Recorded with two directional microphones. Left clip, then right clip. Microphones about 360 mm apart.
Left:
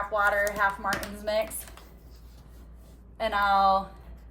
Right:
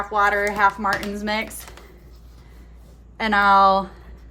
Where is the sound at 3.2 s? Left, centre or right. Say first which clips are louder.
Right 8 dB; centre.